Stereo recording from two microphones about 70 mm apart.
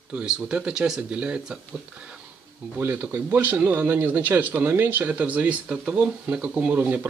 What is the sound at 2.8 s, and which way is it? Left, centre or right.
A man's voice, right.